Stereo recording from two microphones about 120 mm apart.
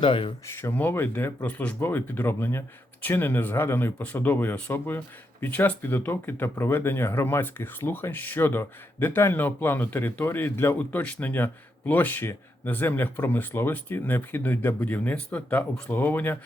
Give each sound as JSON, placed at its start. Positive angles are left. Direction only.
{"t": 0.0, "sound": "speech", "side_deg": 45}
{"t": 0.5, "sound": "speech", "side_deg": 15}